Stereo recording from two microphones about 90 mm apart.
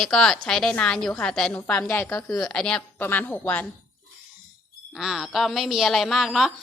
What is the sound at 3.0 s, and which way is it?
Speech, 25° left (ahead or behind).